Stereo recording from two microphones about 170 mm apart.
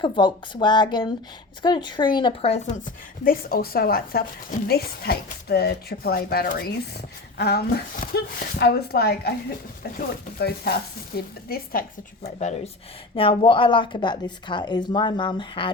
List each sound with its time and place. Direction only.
0.0 s a woman's voice: 25° left (ahead or behind); by 9.3 s 70° left (ahead or behind)
10.3 s speech: 65° left (ahead or behind); by 12.7 s 45° left (ahead or behind)
13.1 s a woman's voice: 30° left (ahead or behind)